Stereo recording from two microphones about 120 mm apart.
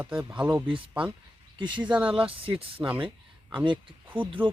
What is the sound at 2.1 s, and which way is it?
Speech, 50° right (ahead or behind).